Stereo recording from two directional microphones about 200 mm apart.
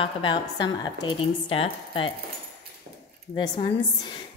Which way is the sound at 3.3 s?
20° left (ahead or behind).